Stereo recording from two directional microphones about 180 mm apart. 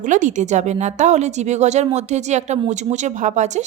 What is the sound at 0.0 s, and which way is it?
A woman's voice, 45° right (ahead or behind).